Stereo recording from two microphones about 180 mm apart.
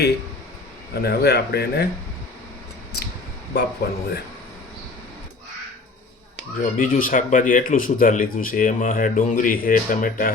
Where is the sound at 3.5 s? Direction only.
65° left (ahead or behind).